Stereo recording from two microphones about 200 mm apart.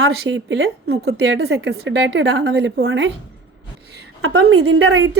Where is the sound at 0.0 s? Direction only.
70° right (ahead or behind).